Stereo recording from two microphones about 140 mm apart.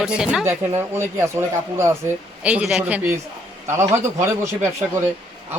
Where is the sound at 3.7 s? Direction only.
20° right (ahead or behind).